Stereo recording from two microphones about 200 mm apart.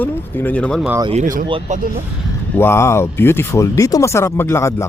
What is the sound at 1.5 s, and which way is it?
Speech, 30° right (ahead or behind).